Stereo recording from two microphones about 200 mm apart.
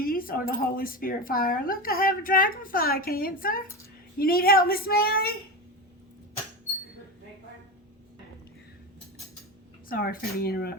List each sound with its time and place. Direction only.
0.0 s speech: 45° left (ahead or behind)
9.9 s speech: 45° left (ahead or behind)